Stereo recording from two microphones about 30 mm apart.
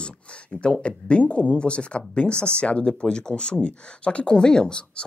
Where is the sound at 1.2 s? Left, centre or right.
Left.